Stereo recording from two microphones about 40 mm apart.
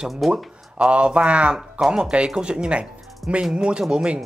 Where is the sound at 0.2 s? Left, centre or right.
Centre.